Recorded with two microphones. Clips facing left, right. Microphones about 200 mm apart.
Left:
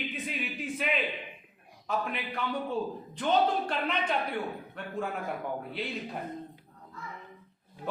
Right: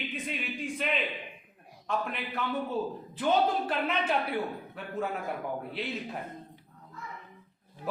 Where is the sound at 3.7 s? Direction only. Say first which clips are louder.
Right 1 dB; 5° right (ahead or behind).